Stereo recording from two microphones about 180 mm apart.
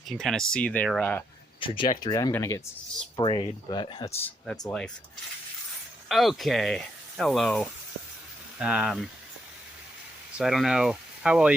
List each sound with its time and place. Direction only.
0.1 s speech: centre (ahead or behind)
1.6 s speech: 30° left (ahead or behind)
3.2 s speech: 30° left (ahead or behind)
4.2 s speech: 5° left (ahead or behind)
6.1 s speech: centre (ahead or behind)
10.3 s speech: centre (ahead or behind)